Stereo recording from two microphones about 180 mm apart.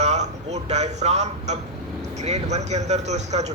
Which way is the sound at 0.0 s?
40° right (ahead or behind).